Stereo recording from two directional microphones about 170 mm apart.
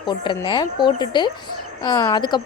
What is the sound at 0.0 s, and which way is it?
A woman's voice, 30° left (ahead or behind).